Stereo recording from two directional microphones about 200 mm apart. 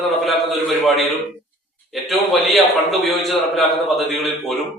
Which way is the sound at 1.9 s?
Centre (ahead or behind).